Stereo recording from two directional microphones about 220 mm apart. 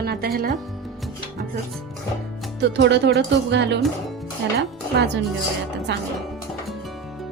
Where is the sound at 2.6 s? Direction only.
50° right (ahead or behind).